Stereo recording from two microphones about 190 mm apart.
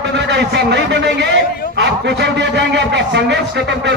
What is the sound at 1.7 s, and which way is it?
A man's voice, 65° right (ahead or behind).